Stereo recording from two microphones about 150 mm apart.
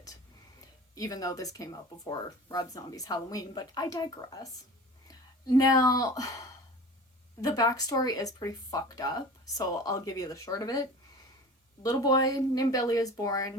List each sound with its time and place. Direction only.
0.9 s speech: 25° left (ahead or behind)
7.4 s speech: 25° left (ahead or behind)